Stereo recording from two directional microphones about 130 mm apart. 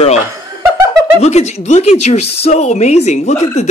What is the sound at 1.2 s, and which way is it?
A woman's voice, 55° left (ahead or behind).